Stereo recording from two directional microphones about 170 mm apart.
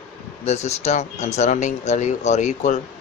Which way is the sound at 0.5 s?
40° left (ahead or behind).